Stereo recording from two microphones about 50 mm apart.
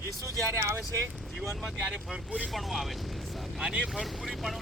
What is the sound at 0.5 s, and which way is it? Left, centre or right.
Speech, right.